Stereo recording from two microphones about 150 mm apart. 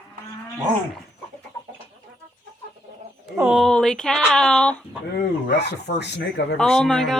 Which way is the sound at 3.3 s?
10° right (ahead or behind).